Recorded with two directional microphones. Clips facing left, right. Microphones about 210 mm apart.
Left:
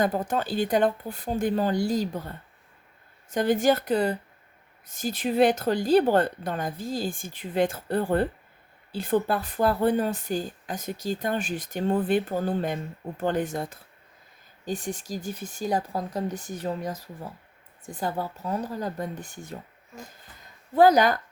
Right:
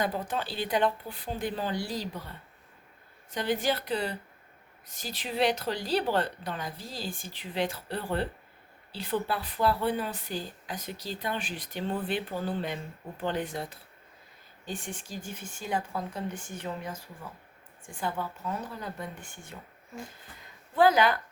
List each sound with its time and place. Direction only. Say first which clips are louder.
0.0 s a woman's voice: left 6 dB; 45° left (ahead or behind)
20.7 s a woman's voice: left 4 dB; 40° left (ahead or behind)